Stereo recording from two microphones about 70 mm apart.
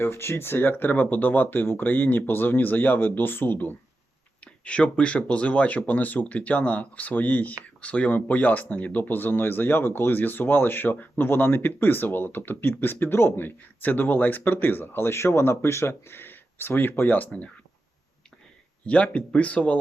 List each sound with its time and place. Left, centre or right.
0.0 s speech: left
4.6 s speech: centre
18.9 s speech: centre